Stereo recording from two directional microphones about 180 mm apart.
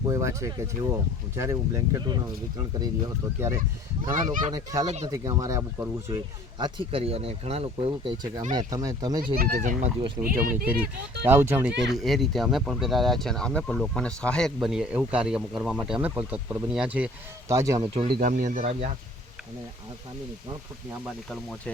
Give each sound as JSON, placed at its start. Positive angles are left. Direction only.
{"t": 0.0, "sound": "speech", "side_deg": -15}
{"t": 4.1, "sound": "speech", "side_deg": -45}
{"t": 4.5, "sound": "speech", "side_deg": -20}
{"t": 8.5, "sound": "speech", "side_deg": -20}
{"t": 9.4, "sound": "speech", "side_deg": -50}
{"t": 11.3, "sound": "speech", "side_deg": -10}
{"t": 11.9, "sound": "speech", "side_deg": 0}
{"t": 17.5, "sound": "speech", "side_deg": -15}
{"t": 18.1, "sound": "speech", "side_deg": -45}